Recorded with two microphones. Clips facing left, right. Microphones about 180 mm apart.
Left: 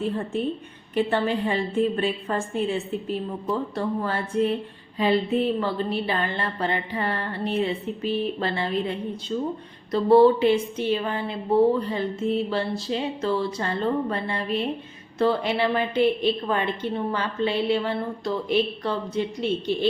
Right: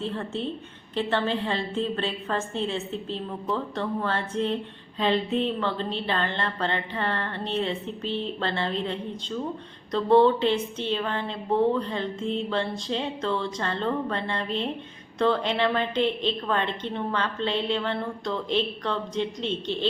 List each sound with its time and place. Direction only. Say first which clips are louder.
0.0 s speech: left 4 dB; 15° left (ahead or behind)